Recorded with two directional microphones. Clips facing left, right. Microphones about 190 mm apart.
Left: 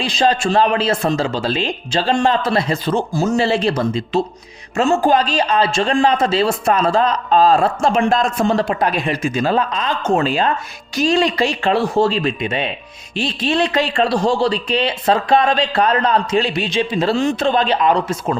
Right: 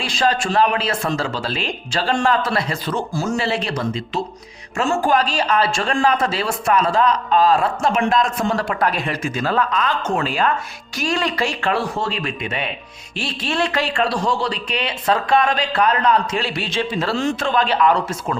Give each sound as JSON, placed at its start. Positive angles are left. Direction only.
{"t": 0.0, "sound": "speech", "side_deg": 20}
{"t": 16.4, "sound": "speech", "side_deg": 20}